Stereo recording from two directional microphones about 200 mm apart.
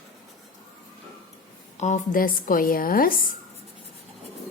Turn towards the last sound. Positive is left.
turn(degrees=45)  # may be behind; listen again after turning